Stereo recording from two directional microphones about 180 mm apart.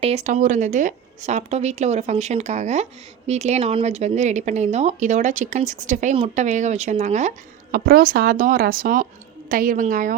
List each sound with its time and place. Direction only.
0.0 s a woman's voice: 35° right (ahead or behind)